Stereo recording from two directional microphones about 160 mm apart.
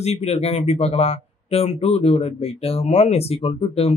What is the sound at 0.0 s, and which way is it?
Speech, 40° left (ahead or behind).